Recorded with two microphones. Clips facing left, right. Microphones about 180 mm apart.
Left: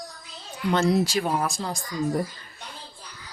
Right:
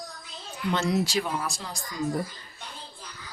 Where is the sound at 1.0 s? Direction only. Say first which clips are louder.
Left 4 dB; 50° left (ahead or behind).